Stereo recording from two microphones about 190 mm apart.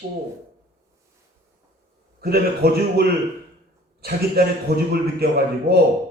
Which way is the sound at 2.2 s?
55° right (ahead or behind).